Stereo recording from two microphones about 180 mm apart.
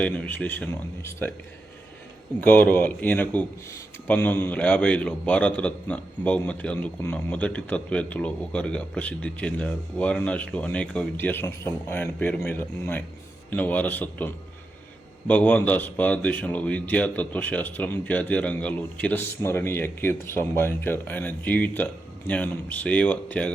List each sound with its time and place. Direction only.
0.0 s speech: 10° left (ahead or behind)
2.4 s speech: 10° left (ahead or behind)
15.3 s speech: 10° left (ahead or behind)